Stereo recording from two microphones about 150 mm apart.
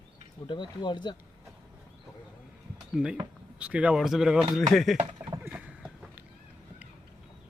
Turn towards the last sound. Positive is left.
turn(degrees=-10)  # may be behind; listen again after turning